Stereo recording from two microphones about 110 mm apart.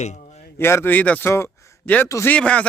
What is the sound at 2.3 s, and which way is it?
Speech, 10° left (ahead or behind).